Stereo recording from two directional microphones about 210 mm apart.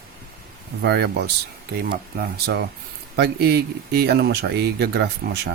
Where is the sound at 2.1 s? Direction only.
45° right (ahead or behind).